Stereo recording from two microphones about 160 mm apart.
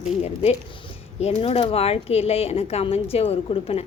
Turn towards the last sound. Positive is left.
turn(degrees=40)  # may be behind; listen again after turning